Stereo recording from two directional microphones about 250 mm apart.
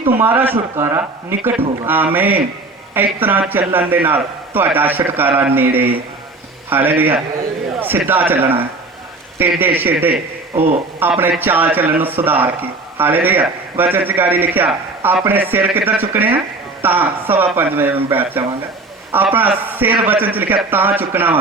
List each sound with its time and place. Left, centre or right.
0.1 s a man's voice: centre
10.5 s speech: right
11.0 s a man's voice: centre